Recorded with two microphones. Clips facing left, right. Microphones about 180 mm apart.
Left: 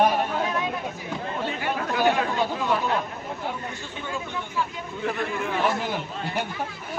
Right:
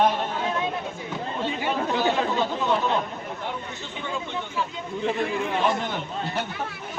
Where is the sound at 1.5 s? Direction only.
20° right (ahead or behind).